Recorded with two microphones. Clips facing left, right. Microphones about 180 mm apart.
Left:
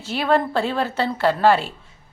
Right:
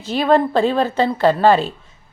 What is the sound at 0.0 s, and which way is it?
A woman's voice, 15° right (ahead or behind).